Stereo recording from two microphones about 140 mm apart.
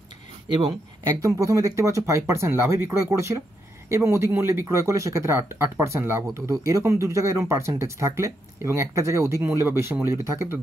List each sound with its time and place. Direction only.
1.0 s speech: 25° right (ahead or behind)